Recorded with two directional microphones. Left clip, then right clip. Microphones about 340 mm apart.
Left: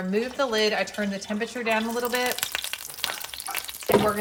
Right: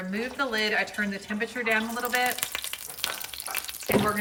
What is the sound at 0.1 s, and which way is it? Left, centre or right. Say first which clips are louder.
Speech: left 4 dB; centre.